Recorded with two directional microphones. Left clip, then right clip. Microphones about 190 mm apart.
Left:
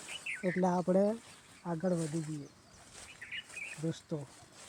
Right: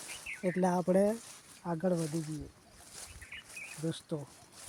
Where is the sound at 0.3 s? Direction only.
5° left (ahead or behind).